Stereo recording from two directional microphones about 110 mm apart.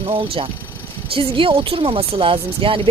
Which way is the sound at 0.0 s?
60° right (ahead or behind).